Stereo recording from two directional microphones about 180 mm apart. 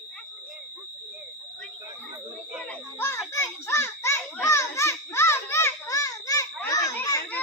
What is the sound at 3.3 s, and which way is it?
Children playing, 15° left (ahead or behind).